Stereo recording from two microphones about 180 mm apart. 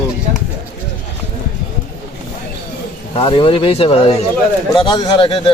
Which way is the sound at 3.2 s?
30° left (ahead or behind).